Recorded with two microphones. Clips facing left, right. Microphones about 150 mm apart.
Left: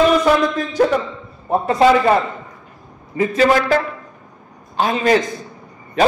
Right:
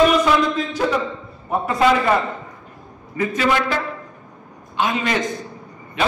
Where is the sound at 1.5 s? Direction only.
30° left (ahead or behind).